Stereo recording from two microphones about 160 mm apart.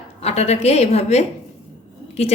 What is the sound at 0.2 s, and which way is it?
A woman's voice, 40° left (ahead or behind).